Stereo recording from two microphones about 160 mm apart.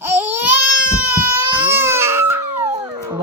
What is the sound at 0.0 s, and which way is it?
Baby cry, 15° right (ahead or behind).